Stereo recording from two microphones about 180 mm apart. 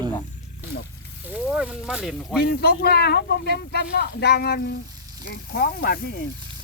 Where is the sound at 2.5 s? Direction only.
60° left (ahead or behind).